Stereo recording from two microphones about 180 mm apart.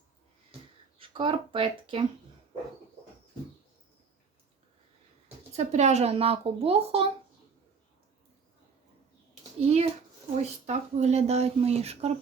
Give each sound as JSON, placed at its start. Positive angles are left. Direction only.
{"t": 0.9, "sound": "speech", "side_deg": -30}
{"t": 5.5, "sound": "speech", "side_deg": -40}
{"t": 9.6, "sound": "a child's voice", "side_deg": -35}